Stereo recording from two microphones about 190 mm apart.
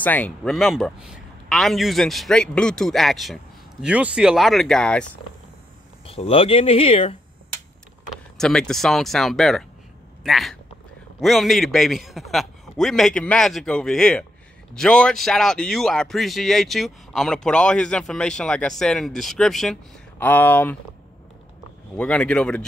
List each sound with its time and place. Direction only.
0.0 s speech: 5° left (ahead or behind)
6.0 s speech: 30° left (ahead or behind)
8.1 s speech: 5° left (ahead or behind)
21.9 s speech: 5° left (ahead or behind)